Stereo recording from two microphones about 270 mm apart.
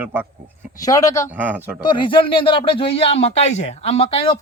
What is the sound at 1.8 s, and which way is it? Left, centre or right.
Speech, centre.